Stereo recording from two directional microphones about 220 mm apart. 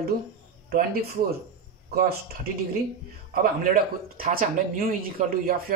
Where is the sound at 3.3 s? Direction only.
40° right (ahead or behind).